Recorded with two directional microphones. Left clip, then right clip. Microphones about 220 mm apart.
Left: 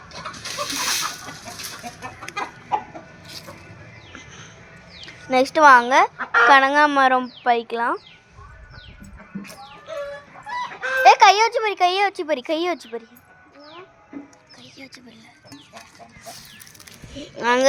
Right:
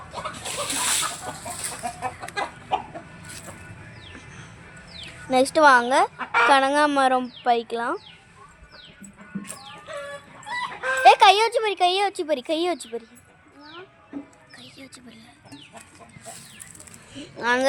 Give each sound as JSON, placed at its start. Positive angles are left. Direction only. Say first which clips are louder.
{"t": 0.1, "sound": "chicken", "louder": "even", "side_deg": 50}
{"t": 2.7, "sound": "chicken", "louder": "left 2 dB", "side_deg": 20}
{"t": 4.9, "sound": "speech", "louder": "left 2 dB", "side_deg": 5}
{"t": 6.1, "sound": "chicken", "louder": "left 4 dB", "side_deg": 15}
{"t": 6.5, "sound": "speech", "louder": "left 5 dB", "side_deg": 0}
{"t": 11.0, "sound": "speech", "louder": "left 2 dB", "side_deg": 0}
{"t": 17.4, "sound": "speech", "louder": "left 4 dB", "side_deg": 20}